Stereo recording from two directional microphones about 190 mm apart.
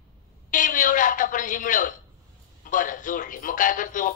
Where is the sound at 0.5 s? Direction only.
45° left (ahead or behind).